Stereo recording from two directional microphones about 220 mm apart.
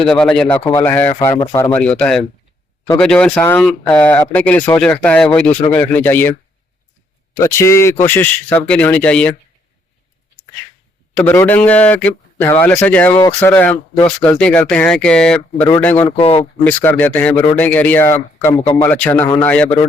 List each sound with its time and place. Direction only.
0.0 s speech: 5° left (ahead or behind)
7.3 s speech: 15° left (ahead or behind)
11.1 s speech: 10° left (ahead or behind)
16.0 s speech: 25° left (ahead or behind)
16.4 s speech: 10° left (ahead or behind)
18.6 s speech: 20° left (ahead or behind)
18.9 s speech: 10° left (ahead or behind)